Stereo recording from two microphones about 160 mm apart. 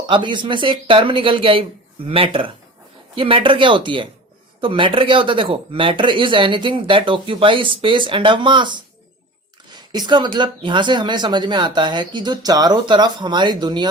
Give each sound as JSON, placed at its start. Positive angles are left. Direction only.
{"t": 0.1, "sound": "speech", "side_deg": -30}